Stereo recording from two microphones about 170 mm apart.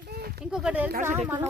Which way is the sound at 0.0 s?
65° right (ahead or behind).